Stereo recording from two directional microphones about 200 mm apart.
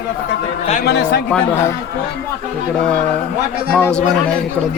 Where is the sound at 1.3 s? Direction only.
10° left (ahead or behind).